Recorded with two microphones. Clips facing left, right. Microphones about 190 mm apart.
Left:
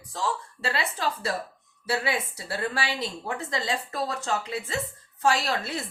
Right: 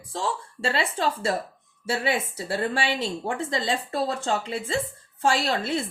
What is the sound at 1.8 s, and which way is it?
Speech, 25° right (ahead or behind).